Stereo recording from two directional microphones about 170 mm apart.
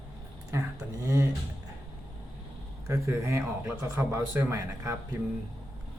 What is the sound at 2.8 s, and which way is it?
Speech, 15° right (ahead or behind).